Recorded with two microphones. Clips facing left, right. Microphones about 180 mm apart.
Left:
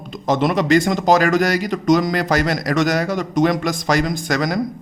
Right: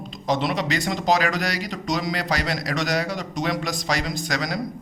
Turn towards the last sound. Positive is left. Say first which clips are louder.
# left 7 dB
turn(degrees=50)  # may be behind; listen again after turning